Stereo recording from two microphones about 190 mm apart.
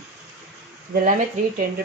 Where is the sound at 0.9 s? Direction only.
45° right (ahead or behind).